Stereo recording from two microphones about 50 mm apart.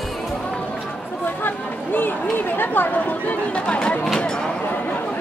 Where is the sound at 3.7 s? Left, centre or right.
Left.